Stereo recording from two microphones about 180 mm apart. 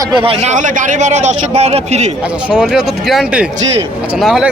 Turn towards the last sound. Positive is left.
turn(degrees=-5)  # may be behind; listen again after turning